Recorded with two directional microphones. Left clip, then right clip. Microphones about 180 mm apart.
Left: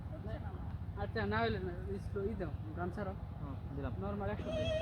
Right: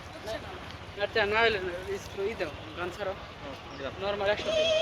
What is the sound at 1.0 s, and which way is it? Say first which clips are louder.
Speech: right 11 dB; 55° left (ahead or behind).